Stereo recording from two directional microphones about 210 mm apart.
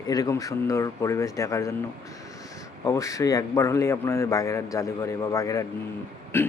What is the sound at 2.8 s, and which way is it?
A man's voice, 15° left (ahead or behind).